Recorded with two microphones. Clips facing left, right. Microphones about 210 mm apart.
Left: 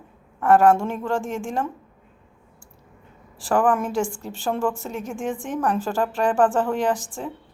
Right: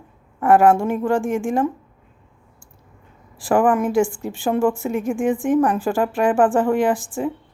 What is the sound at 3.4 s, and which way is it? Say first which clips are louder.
Speech: right 4 dB; 15° right (ahead or behind).